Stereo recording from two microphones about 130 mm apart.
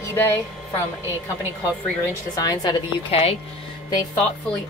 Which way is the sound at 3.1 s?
50° left (ahead or behind).